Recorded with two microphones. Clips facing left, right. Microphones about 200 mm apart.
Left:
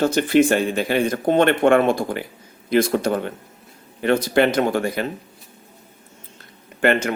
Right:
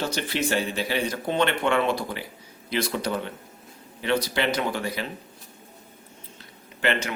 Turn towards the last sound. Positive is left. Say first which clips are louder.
# left 8 dB
turn(degrees=50)  # may be behind; listen again after turning